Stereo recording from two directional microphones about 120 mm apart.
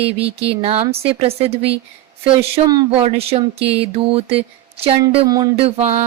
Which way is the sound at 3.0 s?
55° right (ahead or behind).